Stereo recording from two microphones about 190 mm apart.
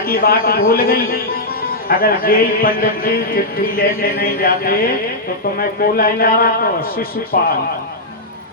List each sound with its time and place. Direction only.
0.1 s speech: 50° left (ahead or behind)